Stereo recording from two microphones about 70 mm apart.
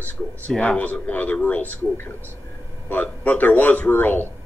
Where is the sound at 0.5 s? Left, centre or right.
Centre.